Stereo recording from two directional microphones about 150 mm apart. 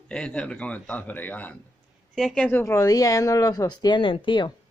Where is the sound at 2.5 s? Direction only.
15° left (ahead or behind); by 4.5 s 30° left (ahead or behind).